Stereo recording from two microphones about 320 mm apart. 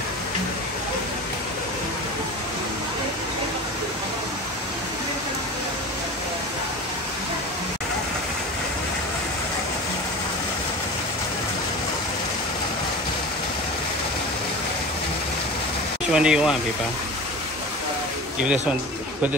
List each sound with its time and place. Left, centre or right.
16.1 s speech: centre
18.4 s speech: centre